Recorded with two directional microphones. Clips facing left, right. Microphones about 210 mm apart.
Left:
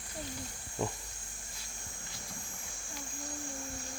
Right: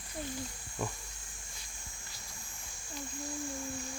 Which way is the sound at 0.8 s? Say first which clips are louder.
Left 3 dB; 20° left (ahead or behind).